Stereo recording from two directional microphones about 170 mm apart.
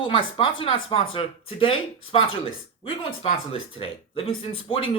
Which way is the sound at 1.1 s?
30° left (ahead or behind).